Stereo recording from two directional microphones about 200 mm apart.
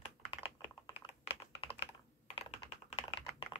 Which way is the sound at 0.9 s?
30° left (ahead or behind).